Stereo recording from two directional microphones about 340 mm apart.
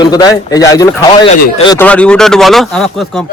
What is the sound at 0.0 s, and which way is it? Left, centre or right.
Speech, centre.